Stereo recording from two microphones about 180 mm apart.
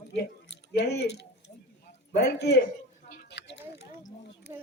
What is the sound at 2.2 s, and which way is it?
Speech, 65° left (ahead or behind).